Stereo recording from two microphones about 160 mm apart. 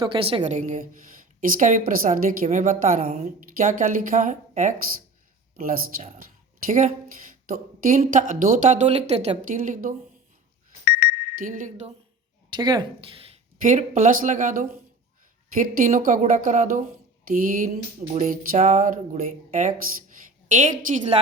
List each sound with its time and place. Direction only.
0.0 s a woman's voice: 35° right (ahead or behind)
0.5 s a woman's voice: 50° right (ahead or behind)
9.6 s a woman's voice: 55° right (ahead or behind)
10.8 s alarm clock: 70° left (ahead or behind)
11.3 s a woman's voice: 55° right (ahead or behind)
12.5 s a woman's voice: 30° right (ahead or behind)
13.6 s a woman's voice: 55° right (ahead or behind)
18.1 s a woman's voice: 45° right (ahead or behind)